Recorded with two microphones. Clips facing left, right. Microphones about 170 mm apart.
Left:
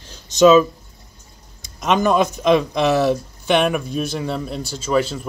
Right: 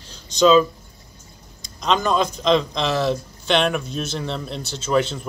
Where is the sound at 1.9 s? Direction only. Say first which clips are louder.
Left 3 dB; 15° left (ahead or behind).